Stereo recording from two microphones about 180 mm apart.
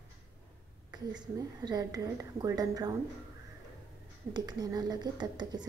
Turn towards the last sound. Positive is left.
turn(degrees=-25)  # may be behind; listen again after turning